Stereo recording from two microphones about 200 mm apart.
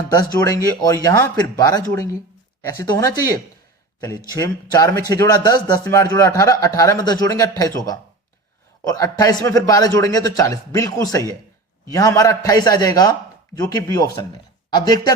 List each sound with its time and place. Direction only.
0.3 s speech: 20° left (ahead or behind)
8.9 s speech: 15° left (ahead or behind)